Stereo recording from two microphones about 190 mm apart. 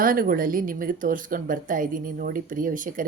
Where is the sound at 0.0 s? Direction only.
45° right (ahead or behind).